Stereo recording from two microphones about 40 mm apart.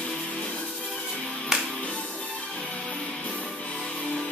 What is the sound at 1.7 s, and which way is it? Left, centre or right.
Music, left.